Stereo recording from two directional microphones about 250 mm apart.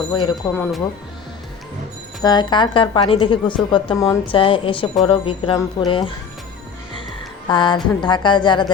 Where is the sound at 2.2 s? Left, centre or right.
Centre.